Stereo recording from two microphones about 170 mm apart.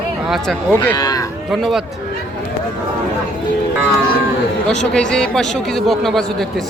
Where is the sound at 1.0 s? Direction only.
20° left (ahead or behind).